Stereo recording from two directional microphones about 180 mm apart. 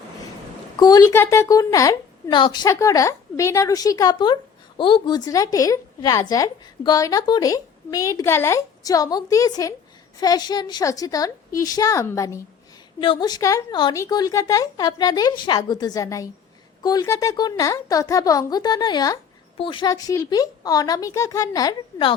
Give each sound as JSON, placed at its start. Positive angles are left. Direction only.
{"t": 0.8, "sound": "a woman's voice", "side_deg": 20}